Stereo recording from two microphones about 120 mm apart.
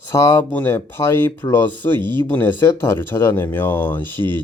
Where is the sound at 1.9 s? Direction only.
40° right (ahead or behind).